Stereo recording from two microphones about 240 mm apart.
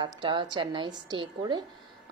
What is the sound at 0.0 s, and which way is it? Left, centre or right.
A woman's voice, centre.